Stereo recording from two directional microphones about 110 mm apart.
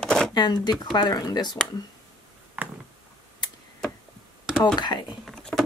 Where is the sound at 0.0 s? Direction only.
5° left (ahead or behind).